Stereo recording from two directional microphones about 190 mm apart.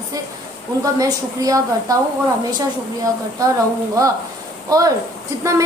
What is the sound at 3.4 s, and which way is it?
Speech, 15° right (ahead or behind).